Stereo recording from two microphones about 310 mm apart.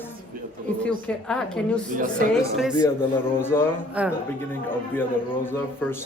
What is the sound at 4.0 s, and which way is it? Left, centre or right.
Speech, centre.